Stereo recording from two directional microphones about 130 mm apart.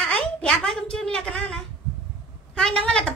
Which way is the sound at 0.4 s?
Centre (ahead or behind).